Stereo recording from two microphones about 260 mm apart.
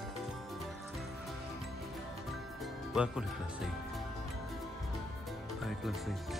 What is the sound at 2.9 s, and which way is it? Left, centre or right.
Speech, centre.